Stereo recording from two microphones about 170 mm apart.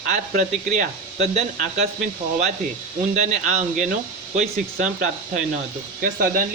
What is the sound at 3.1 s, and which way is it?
Speech, 45° right (ahead or behind).